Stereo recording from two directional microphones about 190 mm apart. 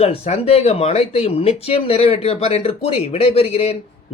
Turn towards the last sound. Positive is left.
turn(degrees=35)  # may be behind; listen again after turning